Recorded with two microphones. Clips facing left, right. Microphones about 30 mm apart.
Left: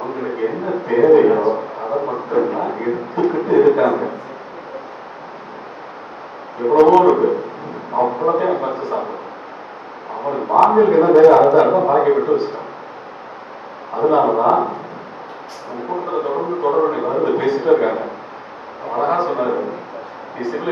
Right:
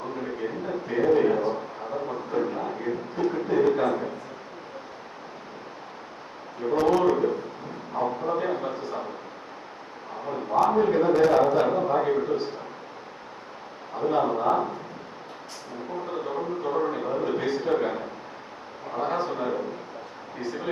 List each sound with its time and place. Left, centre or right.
0.0 s a man's voice: left
1.8 s a sound: left
3.2 s a man's voice: left
6.6 s a man's voice: left
7.9 s a man's voice: left
8.7 s a man's voice: centre
10.2 s a man's voice: left
13.9 s a man's voice: left
15.9 s a man's voice: left
17.4 s a man's voice: centre
17.7 s a man's voice: left
19.4 s a man's voice: left
20.4 s a man's voice: centre